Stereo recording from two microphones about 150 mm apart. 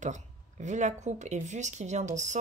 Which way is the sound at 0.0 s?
55° right (ahead or behind).